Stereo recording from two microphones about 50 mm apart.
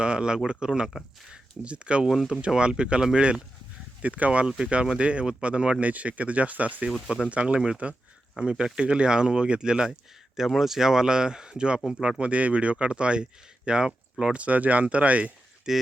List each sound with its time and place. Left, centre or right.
0.0 s speech: centre
15.7 s speech: centre